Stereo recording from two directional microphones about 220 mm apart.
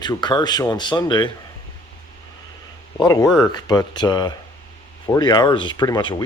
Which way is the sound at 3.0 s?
15° left (ahead or behind).